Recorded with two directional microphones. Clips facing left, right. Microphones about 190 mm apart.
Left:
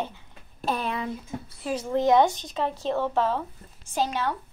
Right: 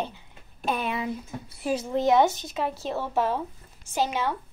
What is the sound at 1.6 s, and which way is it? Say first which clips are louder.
A woman's voice: even; 15° right (ahead or behind).